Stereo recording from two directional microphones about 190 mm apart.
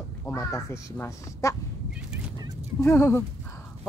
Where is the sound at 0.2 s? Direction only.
15° left (ahead or behind).